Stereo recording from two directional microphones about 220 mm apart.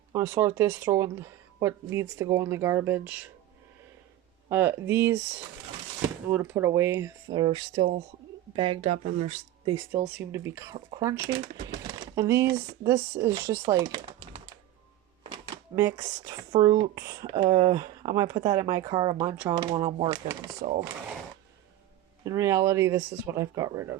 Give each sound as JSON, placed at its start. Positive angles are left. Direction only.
{"t": 0.1, "sound": "speech", "side_deg": -10}
{"t": 4.4, "sound": "speech", "side_deg": -10}
{"t": 6.3, "sound": "speech", "side_deg": -10}
{"t": 10.2, "sound": "speech", "side_deg": -10}
{"t": 13.6, "sound": "typing", "side_deg": -15}
{"t": 15.2, "sound": "speech", "side_deg": -15}
{"t": 22.2, "sound": "speech", "side_deg": -15}